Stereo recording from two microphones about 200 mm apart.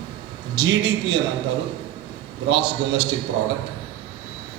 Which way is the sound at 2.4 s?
65° right (ahead or behind).